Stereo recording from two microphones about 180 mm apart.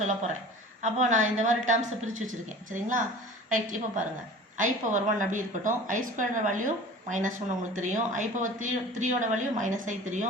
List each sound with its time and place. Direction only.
0.8 s speech: 40° right (ahead or behind)